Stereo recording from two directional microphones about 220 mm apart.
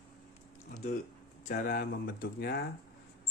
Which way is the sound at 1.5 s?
40° left (ahead or behind).